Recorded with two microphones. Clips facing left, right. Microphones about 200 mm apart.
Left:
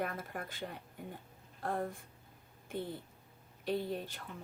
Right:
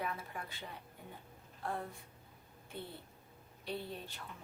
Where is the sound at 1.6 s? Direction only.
45° left (ahead or behind).